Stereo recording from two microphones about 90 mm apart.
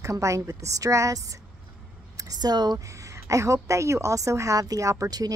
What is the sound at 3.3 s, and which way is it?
A woman's voice, 35° right (ahead or behind).